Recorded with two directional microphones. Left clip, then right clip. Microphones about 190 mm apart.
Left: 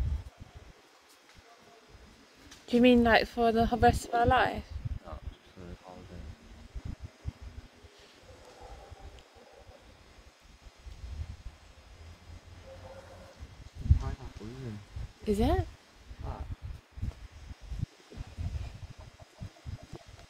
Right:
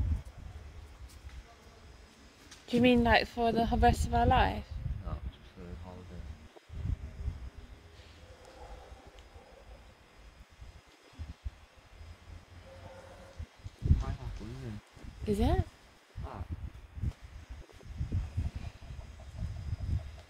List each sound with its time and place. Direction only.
2.6 s speech: 15° left (ahead or behind)
15.2 s speech: 15° left (ahead or behind)